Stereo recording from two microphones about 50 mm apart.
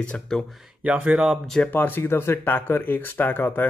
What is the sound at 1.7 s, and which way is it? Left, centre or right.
Speech, left.